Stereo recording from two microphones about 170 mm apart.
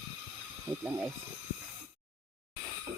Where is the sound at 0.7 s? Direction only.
15° right (ahead or behind).